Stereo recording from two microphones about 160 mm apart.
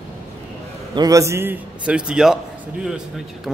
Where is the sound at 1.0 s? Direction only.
20° right (ahead or behind); by 2.3 s 5° right (ahead or behind).